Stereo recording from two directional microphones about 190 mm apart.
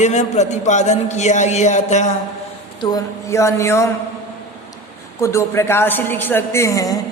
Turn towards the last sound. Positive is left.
turn(degrees=20)  # may be behind; listen again after turning